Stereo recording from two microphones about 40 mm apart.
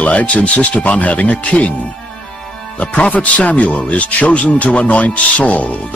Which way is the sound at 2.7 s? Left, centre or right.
Left.